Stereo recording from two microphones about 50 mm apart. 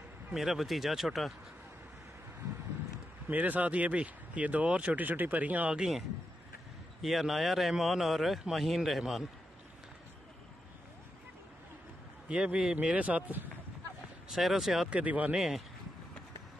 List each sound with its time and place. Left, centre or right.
0.3 s a man's voice: centre
3.3 s speech: right
5.8 s a man's voice: centre
12.3 s a man's voice: right
12.9 s speech: right
14.3 s a man's voice: centre
14.9 s speech: right
15.3 s a man's voice: centre